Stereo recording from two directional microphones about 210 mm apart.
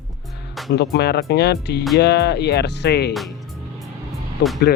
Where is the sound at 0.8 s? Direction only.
50° left (ahead or behind).